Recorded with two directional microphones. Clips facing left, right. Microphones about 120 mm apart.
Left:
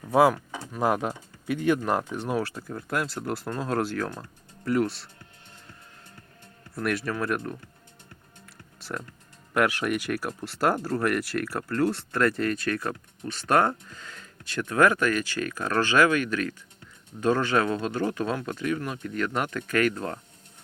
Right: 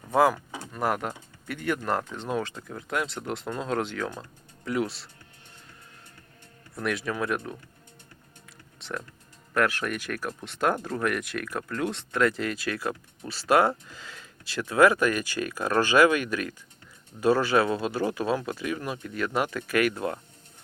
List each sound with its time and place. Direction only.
0.1 s speech: 5° left (ahead or behind)
0.8 s speech: 15° left (ahead or behind); by 5.0 s centre (ahead or behind)
6.7 s speech: centre (ahead or behind)
8.8 s speech: 5° left (ahead or behind)